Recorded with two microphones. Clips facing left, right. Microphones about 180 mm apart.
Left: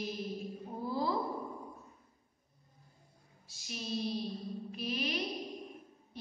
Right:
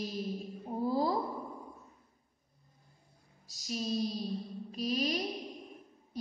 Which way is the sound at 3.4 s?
40° right (ahead or behind).